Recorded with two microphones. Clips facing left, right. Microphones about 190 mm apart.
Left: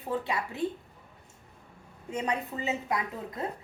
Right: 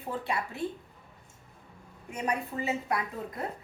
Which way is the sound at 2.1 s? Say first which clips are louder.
Left 1 dB; 20° left (ahead or behind).